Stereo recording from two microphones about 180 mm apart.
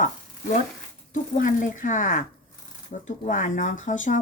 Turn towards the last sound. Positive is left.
turn(degrees=45)  # may be behind; listen again after turning